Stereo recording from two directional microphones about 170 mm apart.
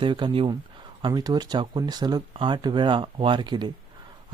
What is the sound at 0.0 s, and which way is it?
Speech, 30° right (ahead or behind).